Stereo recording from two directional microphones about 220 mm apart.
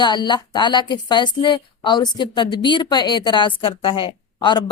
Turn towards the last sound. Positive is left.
turn(degrees=20)  # may be behind; listen again after turning